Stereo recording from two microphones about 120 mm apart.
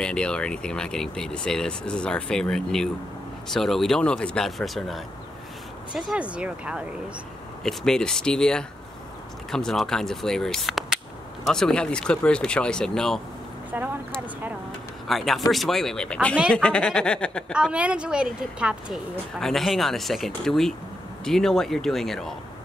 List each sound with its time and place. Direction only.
0.0 s a woman's voice: 10° left (ahead or behind); by 6.8 s 10° right (ahead or behind)
7.6 s speech: 5° left (ahead or behind)
13.7 s a woman's voice: 15° right (ahead or behind)
15.0 s speech: centre (ahead or behind)
17.5 s a woman's voice: 5° right (ahead or behind)